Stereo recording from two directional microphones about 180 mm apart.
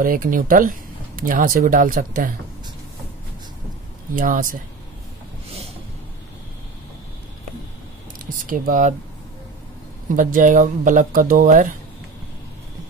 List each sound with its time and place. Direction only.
0.0 s speech: 50° right (ahead or behind)
4.1 s speech: 50° right (ahead or behind)
8.5 s speech: 50° right (ahead or behind)
10.1 s speech: 45° right (ahead or behind)